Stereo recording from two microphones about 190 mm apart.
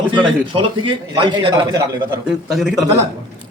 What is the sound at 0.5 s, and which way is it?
A man's voice, 25° right (ahead or behind).